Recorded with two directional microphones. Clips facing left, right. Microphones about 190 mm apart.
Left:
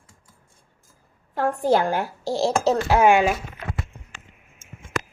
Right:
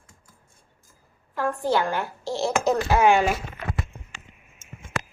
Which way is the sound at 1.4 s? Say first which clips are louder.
Left 4 dB; 40° left (ahead or behind).